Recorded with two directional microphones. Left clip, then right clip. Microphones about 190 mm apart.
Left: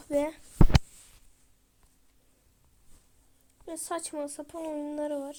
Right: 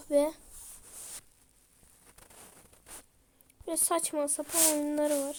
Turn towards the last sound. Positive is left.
turn(degrees=-15)  # may be behind; listen again after turning